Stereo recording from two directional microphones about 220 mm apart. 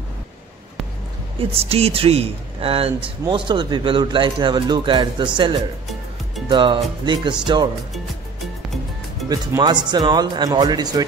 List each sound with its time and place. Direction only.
1.5 s speech: 25° right (ahead or behind)
6.5 s speech: 20° right (ahead or behind)
9.3 s speech: 15° right (ahead or behind)